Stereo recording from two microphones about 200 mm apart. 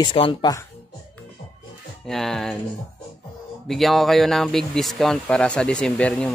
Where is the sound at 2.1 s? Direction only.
Centre (ahead or behind).